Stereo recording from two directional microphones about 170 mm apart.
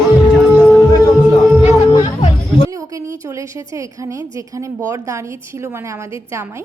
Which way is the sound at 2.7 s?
20° right (ahead or behind).